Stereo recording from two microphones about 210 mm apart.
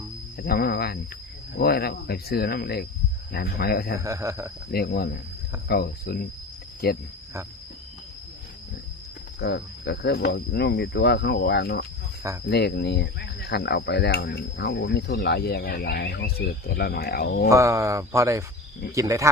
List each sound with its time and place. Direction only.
0.3 s speech: 45° left (ahead or behind)
4.0 s speech: 15° right (ahead or behind)
4.7 s speech: 50° left (ahead or behind)
9.4 s speech: 50° left (ahead or behind)
17.5 s speech: 15° right (ahead or behind)